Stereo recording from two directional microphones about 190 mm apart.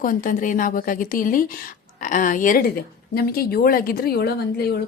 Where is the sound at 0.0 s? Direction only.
45° left (ahead or behind).